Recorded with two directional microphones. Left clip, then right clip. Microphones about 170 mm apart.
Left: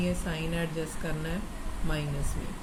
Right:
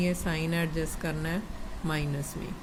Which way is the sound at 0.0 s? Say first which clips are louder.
Right 2 dB; 70° right (ahead or behind).